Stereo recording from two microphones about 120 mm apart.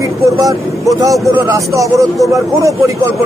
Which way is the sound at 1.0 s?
25° right (ahead or behind).